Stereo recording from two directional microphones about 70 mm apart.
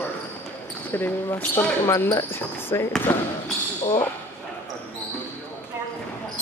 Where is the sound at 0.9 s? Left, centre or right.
Left.